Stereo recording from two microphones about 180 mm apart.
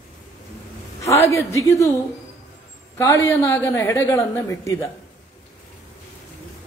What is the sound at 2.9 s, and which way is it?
A woman's voice, 15° left (ahead or behind).